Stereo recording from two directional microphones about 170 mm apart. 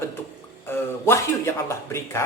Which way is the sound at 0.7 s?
15° left (ahead or behind).